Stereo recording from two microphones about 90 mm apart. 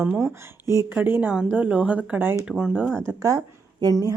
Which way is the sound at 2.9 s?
25° right (ahead or behind).